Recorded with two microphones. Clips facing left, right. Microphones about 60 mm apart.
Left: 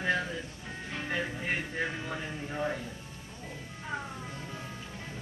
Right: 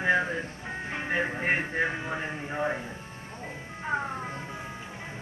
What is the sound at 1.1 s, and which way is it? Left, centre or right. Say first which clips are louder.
A man's voice: right 6 dB; right.